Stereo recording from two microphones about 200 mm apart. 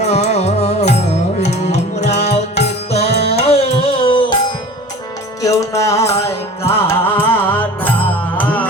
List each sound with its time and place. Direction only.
0.0 s music: 35° left (ahead or behind)
5.4 s music: 15° left (ahead or behind)